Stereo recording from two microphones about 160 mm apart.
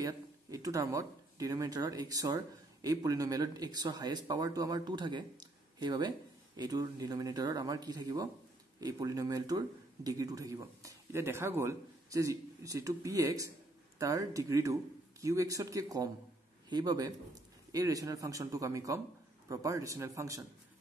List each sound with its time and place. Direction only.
0.0 s a man's voice: 20° right (ahead or behind)